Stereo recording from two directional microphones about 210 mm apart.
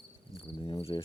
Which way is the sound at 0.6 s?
25° left (ahead or behind).